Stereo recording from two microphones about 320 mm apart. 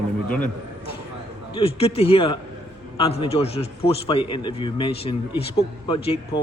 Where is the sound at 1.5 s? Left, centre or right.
Centre.